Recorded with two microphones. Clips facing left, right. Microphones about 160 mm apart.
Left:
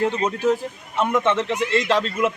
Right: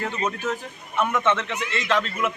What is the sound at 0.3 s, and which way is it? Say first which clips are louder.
A man's voice: left 7 dB; 30° left (ahead or behind).